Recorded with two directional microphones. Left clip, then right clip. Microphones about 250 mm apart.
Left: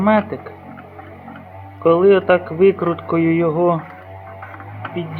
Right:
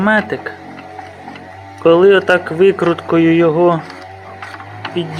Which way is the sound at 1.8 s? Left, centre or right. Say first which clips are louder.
Right 4 dB; centre.